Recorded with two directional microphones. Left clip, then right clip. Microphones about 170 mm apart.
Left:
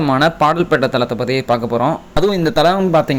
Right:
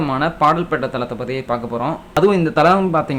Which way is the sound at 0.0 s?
30° left (ahead or behind).